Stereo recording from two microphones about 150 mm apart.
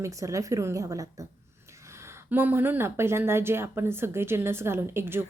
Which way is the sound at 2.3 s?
15° right (ahead or behind).